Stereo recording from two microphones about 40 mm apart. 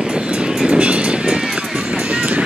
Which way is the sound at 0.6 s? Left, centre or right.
Right.